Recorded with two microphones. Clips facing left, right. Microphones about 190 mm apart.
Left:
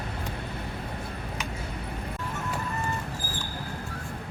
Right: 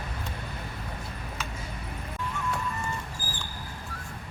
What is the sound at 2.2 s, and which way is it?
Music, 40° left (ahead or behind).